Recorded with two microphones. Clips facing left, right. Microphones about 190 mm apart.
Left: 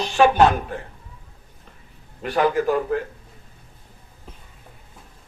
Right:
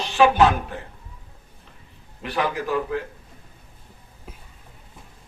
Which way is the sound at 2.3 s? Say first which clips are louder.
Left 5 dB; 40° left (ahead or behind).